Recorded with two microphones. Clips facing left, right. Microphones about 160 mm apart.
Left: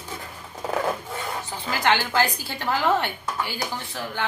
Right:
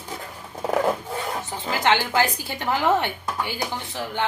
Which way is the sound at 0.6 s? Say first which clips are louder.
Right 4 dB; 15° right (ahead or behind).